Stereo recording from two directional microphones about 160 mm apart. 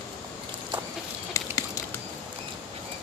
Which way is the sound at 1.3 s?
20° left (ahead or behind).